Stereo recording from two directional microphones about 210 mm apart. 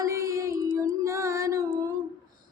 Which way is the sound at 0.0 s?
15° right (ahead or behind).